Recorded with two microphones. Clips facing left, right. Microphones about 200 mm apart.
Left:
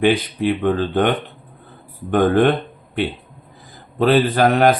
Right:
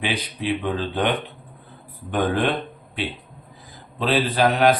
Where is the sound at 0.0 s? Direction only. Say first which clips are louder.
Left 10 dB; 50° left (ahead or behind).